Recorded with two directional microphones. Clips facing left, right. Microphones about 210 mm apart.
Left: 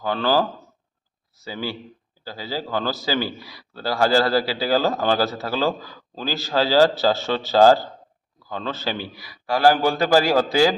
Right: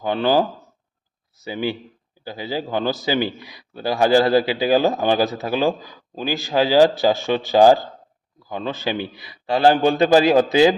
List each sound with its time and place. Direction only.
0.0 s a man's voice: 20° right (ahead or behind)
1.5 s a man's voice: 20° right (ahead or behind)